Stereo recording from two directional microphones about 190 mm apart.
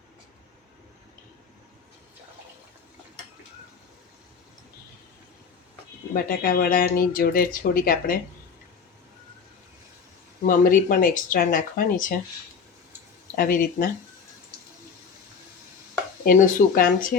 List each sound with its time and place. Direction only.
6.1 s speech: 50° left (ahead or behind)
10.4 s speech: 45° left (ahead or behind)
13.3 s speech: 50° left (ahead or behind)
16.2 s speech: 50° left (ahead or behind)